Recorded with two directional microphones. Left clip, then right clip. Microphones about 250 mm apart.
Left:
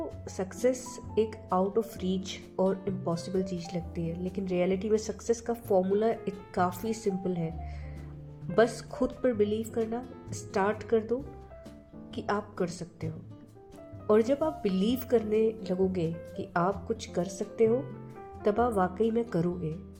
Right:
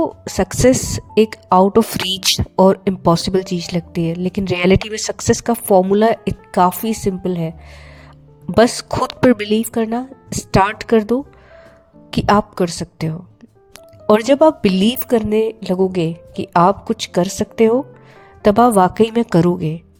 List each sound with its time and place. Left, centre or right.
0.0 s speech: right
8.5 s speech: right